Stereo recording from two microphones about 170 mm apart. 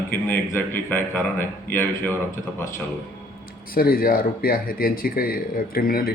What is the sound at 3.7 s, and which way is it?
Speech, 60° left (ahead or behind).